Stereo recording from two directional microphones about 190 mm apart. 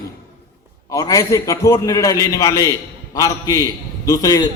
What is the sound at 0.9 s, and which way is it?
A man's voice, 20° left (ahead or behind).